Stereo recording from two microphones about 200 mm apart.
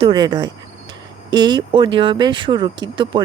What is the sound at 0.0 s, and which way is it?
Speech, 20° right (ahead or behind).